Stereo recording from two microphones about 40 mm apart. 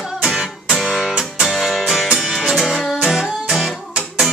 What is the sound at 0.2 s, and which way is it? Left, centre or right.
Music, centre.